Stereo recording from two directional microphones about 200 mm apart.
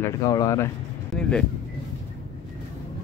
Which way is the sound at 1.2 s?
5° left (ahead or behind).